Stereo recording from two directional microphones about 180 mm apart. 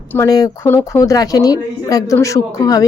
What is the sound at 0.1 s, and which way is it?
A woman's voice, 15° left (ahead or behind).